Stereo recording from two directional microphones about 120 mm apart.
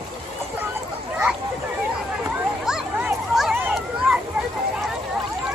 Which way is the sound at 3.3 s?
5° right (ahead or behind).